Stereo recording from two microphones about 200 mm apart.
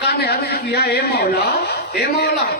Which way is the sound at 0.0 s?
55° left (ahead or behind).